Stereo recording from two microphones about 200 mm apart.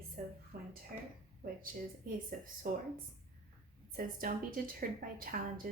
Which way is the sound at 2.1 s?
45° right (ahead or behind).